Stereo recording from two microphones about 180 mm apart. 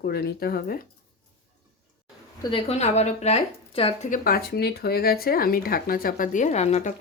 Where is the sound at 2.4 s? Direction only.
30° left (ahead or behind).